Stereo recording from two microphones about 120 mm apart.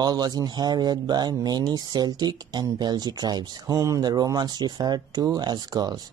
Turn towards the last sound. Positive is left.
turn(degrees=-35)  # may be behind; listen again after turning